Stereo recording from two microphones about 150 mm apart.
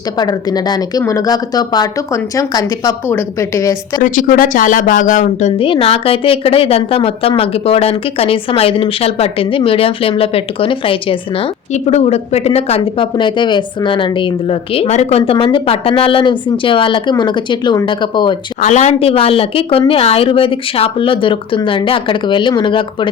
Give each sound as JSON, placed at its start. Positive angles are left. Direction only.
{"t": 0.2, "sound": "speech", "side_deg": 25}
{"t": 4.0, "sound": "speech", "side_deg": 60}
{"t": 5.6, "sound": "a woman's voice", "side_deg": 40}
{"t": 18.6, "sound": "a woman's voice", "side_deg": 50}